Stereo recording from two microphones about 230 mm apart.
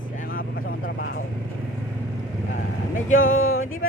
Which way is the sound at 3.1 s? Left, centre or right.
Left.